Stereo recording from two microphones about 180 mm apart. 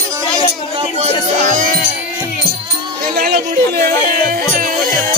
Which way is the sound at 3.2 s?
55° right (ahead or behind).